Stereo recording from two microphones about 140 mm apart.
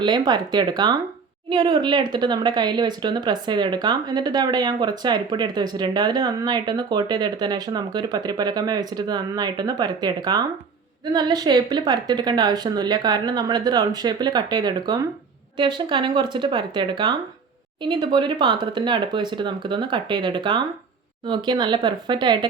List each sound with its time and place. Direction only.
0.0 s speech: 30° right (ahead or behind)